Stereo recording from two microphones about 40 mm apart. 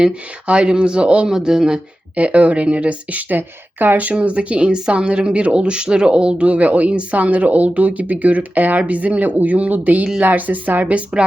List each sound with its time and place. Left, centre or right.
0.1 s speech: right
1.3 s speech: centre
2.1 s speech: right
4.0 s speech: right